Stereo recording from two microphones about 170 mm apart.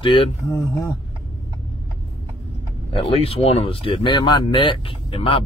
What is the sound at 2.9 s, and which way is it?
Speech, 30° left (ahead or behind).